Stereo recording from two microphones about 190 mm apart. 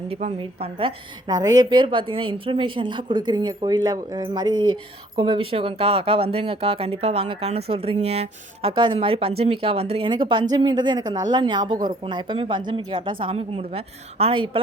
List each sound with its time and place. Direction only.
0.1 s speech: 35° right (ahead or behind)